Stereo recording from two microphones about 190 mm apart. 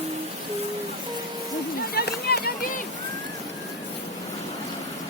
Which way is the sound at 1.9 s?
55° left (ahead or behind).